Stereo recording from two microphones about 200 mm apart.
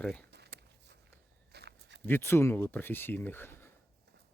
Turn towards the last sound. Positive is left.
turn(degrees=10)  # may be behind; listen again after turning